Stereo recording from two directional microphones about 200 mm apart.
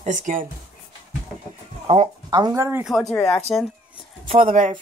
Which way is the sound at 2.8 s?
Centre (ahead or behind).